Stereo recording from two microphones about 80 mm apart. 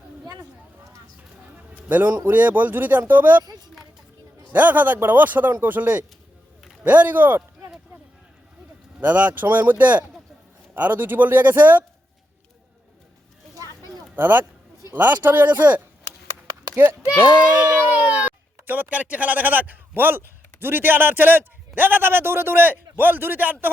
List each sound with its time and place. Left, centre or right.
1.9 s speech: right
3.4 s a sound: right
4.5 s speech: right
9.0 s speech: centre
14.2 s speech: right
17.2 s speech: centre